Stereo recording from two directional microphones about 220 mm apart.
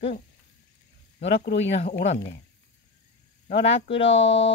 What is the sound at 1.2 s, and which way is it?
Speech, 55° left (ahead or behind).